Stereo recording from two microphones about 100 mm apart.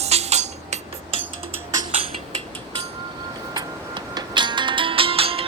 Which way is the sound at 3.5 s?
45° right (ahead or behind).